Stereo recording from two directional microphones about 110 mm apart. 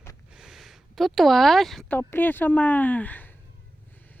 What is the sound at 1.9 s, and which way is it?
A woman's voice, 15° left (ahead or behind).